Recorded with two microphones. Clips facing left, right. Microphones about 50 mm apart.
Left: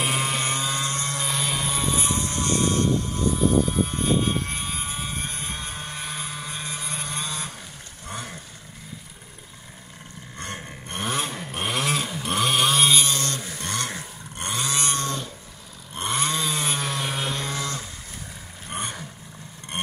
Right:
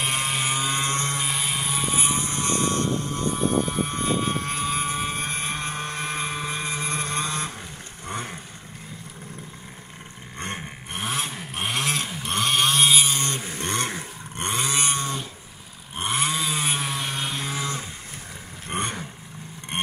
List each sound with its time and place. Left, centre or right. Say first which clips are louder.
0.0 s vehicle: left 1 dB; centre
0.7 s vehicle: right 2 dB; right
1.2 s vehicle: left 1 dB; centre
2.0 s vehicle: even; right
8.1 s vehicle: right 3 dB; right
10.9 s a sound: left 1 dB; centre
13.0 s a sound: right 1 dB; right
18.7 s vehicle: right 4 dB; right